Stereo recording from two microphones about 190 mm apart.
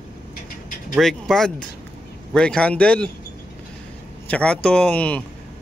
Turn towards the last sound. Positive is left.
turn(degrees=5)  # may be behind; listen again after turning